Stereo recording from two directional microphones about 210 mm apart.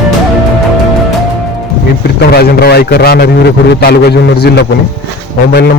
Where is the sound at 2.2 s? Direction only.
50° left (ahead or behind).